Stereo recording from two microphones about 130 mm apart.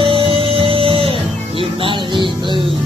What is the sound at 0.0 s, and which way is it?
Music, 45° right (ahead or behind).